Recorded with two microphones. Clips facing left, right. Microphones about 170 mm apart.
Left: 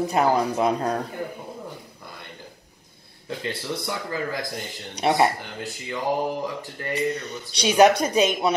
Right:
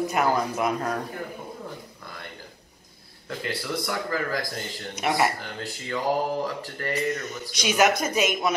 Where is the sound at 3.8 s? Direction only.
20° left (ahead or behind).